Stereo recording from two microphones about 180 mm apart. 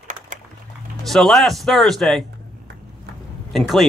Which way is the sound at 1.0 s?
Centre (ahead or behind).